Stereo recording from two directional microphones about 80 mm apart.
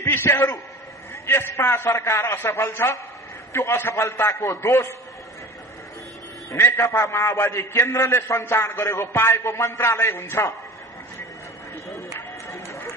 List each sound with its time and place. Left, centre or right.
0.0 s a man's voice: left
6.5 s a man's voice: left
12.1 s run: left